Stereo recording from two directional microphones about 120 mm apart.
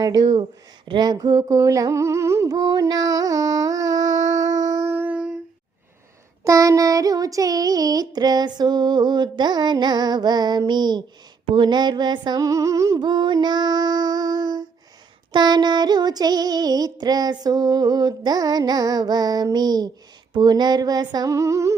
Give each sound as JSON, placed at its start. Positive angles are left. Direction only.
{"t": 0.0, "sound": "child singing", "side_deg": -35}
{"t": 0.9, "sound": "humming", "side_deg": -35}
{"t": 6.4, "sound": "child singing", "side_deg": -30}
{"t": 13.0, "sound": "female singing", "side_deg": -40}
{"t": 15.3, "sound": "child singing", "side_deg": -35}